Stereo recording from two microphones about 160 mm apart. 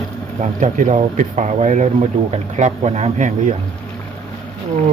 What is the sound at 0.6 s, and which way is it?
Speech, 50° right (ahead or behind).